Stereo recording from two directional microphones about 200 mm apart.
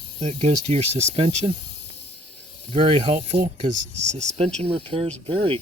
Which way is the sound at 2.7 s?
30° right (ahead or behind).